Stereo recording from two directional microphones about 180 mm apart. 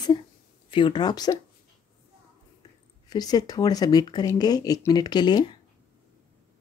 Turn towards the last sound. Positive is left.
turn(degrees=25)  # may be behind; listen again after turning